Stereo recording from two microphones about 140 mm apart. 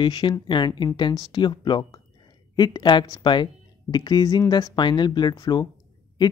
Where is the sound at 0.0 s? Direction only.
30° left (ahead or behind).